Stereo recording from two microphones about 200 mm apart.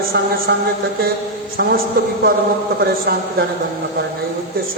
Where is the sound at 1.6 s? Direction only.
55° right (ahead or behind).